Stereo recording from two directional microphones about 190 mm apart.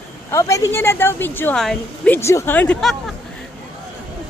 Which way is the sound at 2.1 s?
15° left (ahead or behind).